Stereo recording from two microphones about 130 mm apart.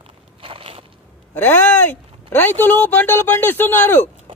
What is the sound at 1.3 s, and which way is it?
A man's voice, 15° left (ahead or behind).